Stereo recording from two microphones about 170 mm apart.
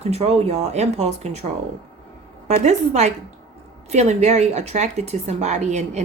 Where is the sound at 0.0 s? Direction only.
40° right (ahead or behind).